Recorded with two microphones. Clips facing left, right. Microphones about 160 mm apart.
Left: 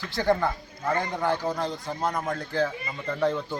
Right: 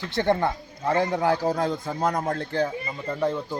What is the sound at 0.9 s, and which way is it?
Speech, 5° right (ahead or behind).